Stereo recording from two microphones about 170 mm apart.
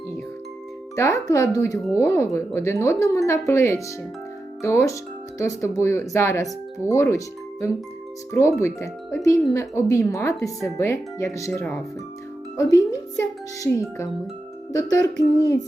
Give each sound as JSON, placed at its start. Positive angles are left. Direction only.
{"t": 0.9, "sound": "speech", "side_deg": 15}
{"t": 8.3, "sound": "a child's voice", "side_deg": 15}